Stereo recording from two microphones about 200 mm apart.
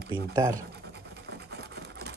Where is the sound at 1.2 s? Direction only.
55° right (ahead or behind).